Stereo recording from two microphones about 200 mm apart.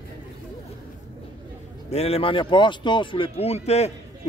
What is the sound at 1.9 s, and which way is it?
Speech, 30° left (ahead or behind).